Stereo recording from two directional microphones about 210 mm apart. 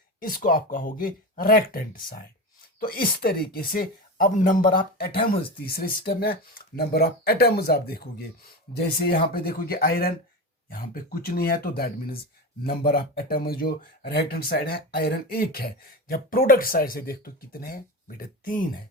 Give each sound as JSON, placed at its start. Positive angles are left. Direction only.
{"t": 0.2, "sound": "speech", "side_deg": 40}
{"t": 2.8, "sound": "speech", "side_deg": 45}